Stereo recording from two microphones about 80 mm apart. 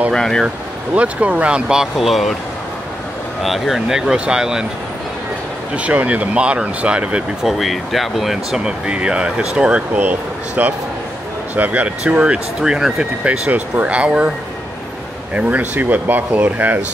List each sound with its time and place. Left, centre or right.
0.1 s speech: centre
0.9 s speech: centre
3.4 s speech: centre
5.8 s speech: centre
7.4 s speech: centre
15.3 s speech: centre